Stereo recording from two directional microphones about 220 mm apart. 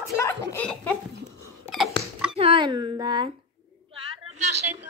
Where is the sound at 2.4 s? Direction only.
25° right (ahead or behind).